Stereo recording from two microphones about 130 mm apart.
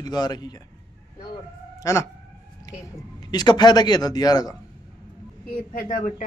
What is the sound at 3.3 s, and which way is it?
A man's voice, 35° left (ahead or behind).